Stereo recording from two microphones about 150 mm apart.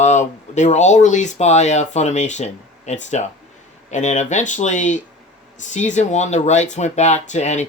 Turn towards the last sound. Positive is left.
turn(degrees=50)  # may be behind; listen again after turning